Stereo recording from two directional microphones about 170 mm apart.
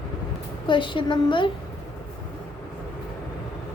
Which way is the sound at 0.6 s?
30° left (ahead or behind).